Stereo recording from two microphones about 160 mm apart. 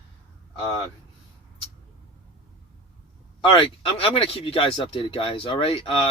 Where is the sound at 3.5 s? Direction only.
35° left (ahead or behind).